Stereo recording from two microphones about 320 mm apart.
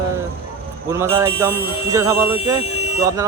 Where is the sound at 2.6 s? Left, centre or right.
Centre.